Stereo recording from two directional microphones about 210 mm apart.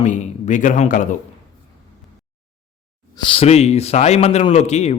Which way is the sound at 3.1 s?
25° left (ahead or behind).